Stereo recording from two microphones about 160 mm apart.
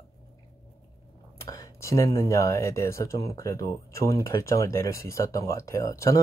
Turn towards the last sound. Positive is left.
turn(degrees=20)  # may be behind; listen again after turning